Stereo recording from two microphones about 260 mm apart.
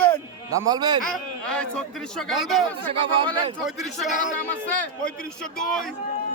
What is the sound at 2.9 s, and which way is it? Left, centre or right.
Speech, right.